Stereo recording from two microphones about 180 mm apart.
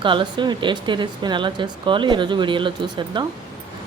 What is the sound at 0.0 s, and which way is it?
Speech, 25° right (ahead or behind).